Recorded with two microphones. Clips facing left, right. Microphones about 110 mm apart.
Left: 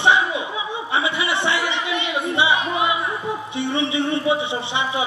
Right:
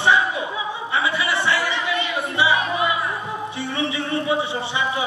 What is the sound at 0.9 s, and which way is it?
Music, 20° left (ahead or behind).